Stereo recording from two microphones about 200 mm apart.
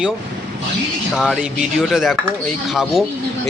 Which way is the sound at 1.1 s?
Centre (ahead or behind).